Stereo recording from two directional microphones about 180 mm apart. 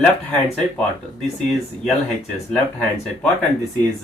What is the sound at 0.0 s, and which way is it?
Speech, 5° left (ahead or behind).